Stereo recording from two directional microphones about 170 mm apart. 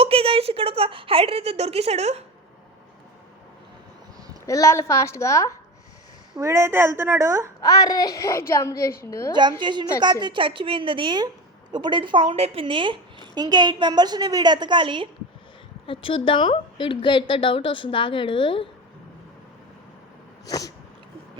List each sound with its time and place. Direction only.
0.0 s a woman's voice: 35° right (ahead or behind)
4.4 s a woman's voice: 15° left (ahead or behind)
6.3 s a woman's voice: 15° right (ahead or behind)
7.6 s a woman's voice: 20° left (ahead or behind)
9.3 s a woman's voice: 25° right (ahead or behind)
15.9 s a woman's voice: 30° left (ahead or behind)
20.5 s a woman's voice: 20° left (ahead or behind)